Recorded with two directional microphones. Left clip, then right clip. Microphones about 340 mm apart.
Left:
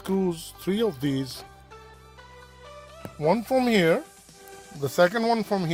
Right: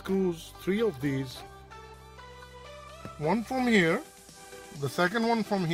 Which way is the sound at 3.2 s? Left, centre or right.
Left.